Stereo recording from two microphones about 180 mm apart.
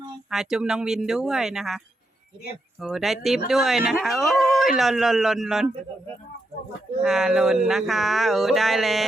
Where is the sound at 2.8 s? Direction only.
Centre (ahead or behind).